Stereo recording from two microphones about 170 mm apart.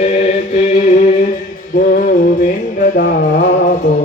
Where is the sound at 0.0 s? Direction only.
40° left (ahead or behind).